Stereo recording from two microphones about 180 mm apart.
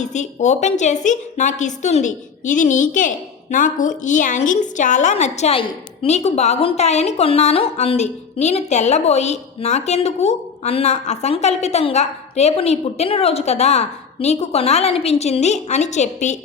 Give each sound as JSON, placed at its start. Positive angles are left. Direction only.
{"t": 0.0, "sound": "a woman's voice", "side_deg": 40}